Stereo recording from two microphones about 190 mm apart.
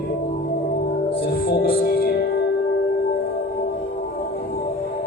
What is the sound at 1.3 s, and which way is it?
Music, 50° left (ahead or behind).